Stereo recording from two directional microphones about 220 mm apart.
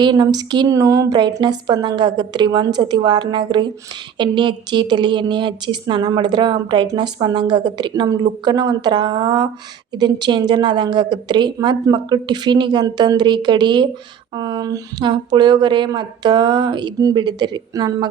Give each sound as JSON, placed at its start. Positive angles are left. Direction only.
{"t": 0.0, "sound": "a woman's voice", "side_deg": -20}